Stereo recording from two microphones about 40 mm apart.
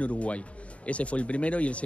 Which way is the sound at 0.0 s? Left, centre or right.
Left.